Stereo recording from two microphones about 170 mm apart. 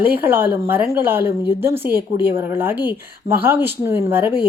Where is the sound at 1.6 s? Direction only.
15° right (ahead or behind).